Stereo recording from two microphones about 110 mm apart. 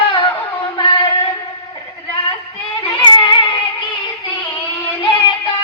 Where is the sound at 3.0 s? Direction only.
45° left (ahead or behind).